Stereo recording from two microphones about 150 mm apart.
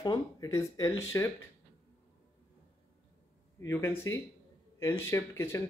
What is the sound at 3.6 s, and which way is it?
Speech, 15° left (ahead or behind).